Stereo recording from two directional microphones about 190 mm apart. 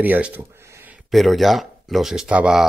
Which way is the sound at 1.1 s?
Centre (ahead or behind).